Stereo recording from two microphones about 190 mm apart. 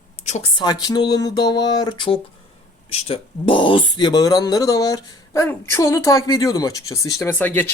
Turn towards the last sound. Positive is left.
turn(degrees=10)  # may be behind; listen again after turning